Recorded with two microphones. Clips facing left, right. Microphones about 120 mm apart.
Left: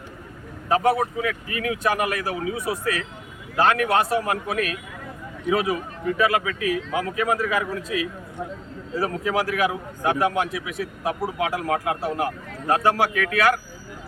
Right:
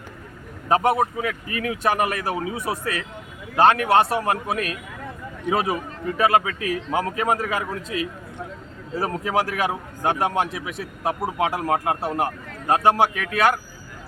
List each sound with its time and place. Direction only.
0.7 s a man's voice: 30° right (ahead or behind)